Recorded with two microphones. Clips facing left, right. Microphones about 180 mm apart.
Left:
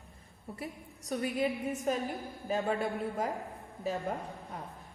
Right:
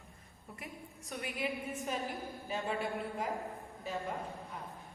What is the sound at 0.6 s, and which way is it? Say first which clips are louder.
A woman's voice: left 4 dB; 35° left (ahead or behind).